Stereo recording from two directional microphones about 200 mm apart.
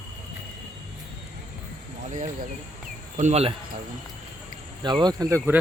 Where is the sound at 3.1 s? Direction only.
35° right (ahead or behind).